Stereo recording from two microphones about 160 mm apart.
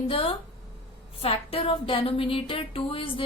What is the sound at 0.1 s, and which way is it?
Music, 35° left (ahead or behind).